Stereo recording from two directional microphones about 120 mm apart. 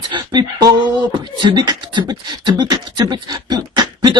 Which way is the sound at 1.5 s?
35° right (ahead or behind).